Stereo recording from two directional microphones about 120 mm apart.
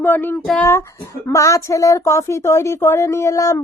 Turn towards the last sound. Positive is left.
turn(degrees=25)  # may be behind; listen again after turning